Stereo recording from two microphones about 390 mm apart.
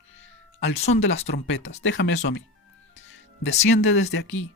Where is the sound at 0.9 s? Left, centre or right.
Left.